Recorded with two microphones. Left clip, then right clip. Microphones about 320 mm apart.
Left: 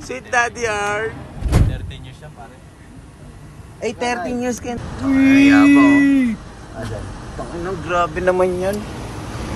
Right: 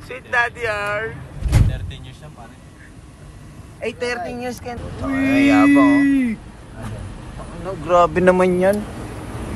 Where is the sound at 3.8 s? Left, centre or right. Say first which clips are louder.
Left 2 dB; centre.